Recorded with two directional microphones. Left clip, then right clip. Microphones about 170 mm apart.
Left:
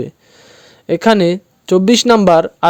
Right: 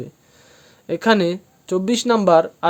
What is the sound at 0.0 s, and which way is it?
Speech, 45° left (ahead or behind).